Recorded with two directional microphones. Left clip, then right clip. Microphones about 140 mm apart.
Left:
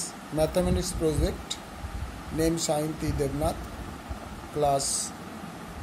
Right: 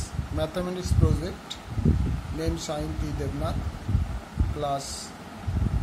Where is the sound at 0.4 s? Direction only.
30° left (ahead or behind).